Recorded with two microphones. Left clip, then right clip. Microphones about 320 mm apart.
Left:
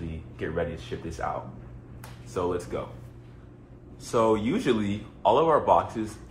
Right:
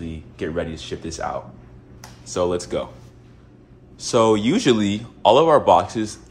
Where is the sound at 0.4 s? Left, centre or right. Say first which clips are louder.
Right 4 dB; right.